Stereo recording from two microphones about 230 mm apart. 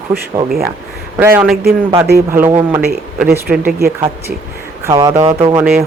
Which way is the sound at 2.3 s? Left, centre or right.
Centre.